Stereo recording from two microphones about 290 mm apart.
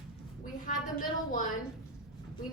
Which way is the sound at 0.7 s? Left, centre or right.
Left.